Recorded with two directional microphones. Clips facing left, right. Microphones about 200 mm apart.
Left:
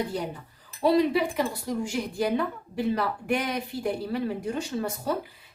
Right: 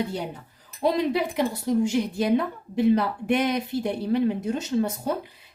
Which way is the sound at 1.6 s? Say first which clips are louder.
Right 7 dB; 25° right (ahead or behind).